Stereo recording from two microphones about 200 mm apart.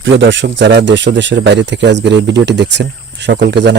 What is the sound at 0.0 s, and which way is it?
Speech, 65° right (ahead or behind).